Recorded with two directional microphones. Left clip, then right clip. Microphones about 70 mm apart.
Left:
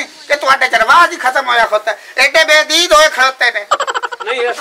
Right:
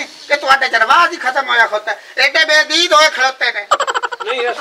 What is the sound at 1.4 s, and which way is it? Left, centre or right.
A man's voice, left.